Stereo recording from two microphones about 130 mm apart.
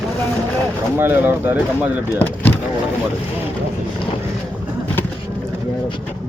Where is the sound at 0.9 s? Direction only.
15° right (ahead or behind).